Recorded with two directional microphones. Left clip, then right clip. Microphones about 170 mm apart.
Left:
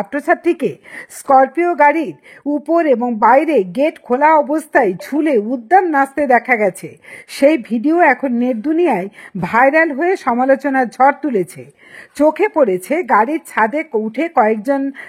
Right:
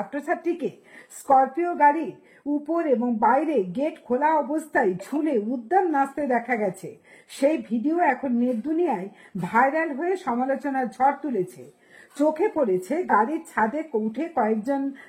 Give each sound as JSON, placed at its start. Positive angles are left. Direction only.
{"t": 0.1, "sound": "a woman's voice", "side_deg": 35}
{"t": 12.2, "sound": "a woman's voice", "side_deg": 35}